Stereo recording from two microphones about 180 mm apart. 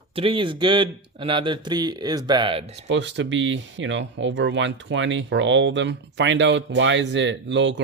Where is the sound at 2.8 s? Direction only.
85° right.